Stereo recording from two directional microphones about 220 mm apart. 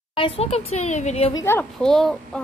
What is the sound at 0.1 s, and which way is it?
Speech, 25° left (ahead or behind).